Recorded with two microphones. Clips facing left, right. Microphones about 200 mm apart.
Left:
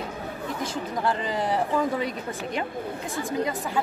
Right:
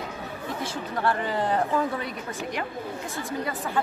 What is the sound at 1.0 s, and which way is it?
Speech, 15° left (ahead or behind).